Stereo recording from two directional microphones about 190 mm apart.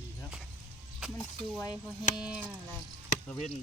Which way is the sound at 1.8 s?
5° right (ahead or behind).